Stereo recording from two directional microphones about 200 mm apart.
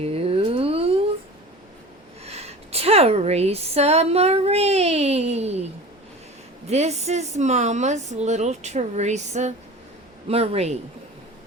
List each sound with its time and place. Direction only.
0.0 s a sound: 30° right (ahead or behind)
2.2 s a woman's voice: 30° right (ahead or behind)
6.7 s a woman's voice: 35° right (ahead or behind)